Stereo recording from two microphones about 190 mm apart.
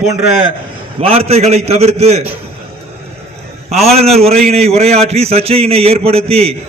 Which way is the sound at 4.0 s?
35° right (ahead or behind).